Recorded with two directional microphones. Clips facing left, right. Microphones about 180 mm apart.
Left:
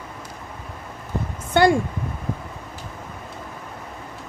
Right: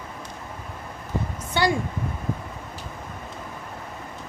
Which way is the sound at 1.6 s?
55° left (ahead or behind).